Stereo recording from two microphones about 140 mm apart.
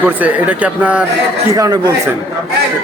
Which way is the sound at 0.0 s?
10° right (ahead or behind).